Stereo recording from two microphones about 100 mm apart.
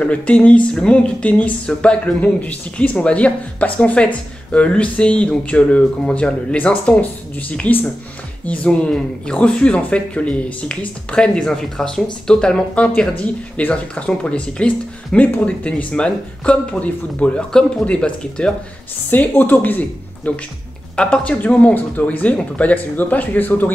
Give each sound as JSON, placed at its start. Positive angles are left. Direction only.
{"t": 0.0, "sound": "speech", "side_deg": 10}